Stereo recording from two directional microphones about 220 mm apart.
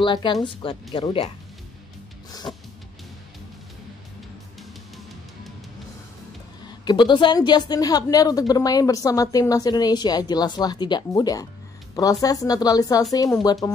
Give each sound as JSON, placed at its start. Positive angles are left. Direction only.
{"t": 0.0, "sound": "speech", "side_deg": 20}
{"t": 2.5, "sound": "a woman's voice", "side_deg": 15}
{"t": 6.8, "sound": "a woman's voice", "side_deg": 20}